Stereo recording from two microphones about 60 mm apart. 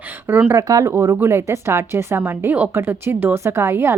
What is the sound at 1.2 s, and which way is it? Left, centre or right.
A woman's voice, right.